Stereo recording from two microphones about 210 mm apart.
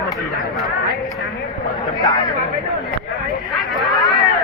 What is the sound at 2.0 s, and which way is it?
Speech, 20° left (ahead or behind).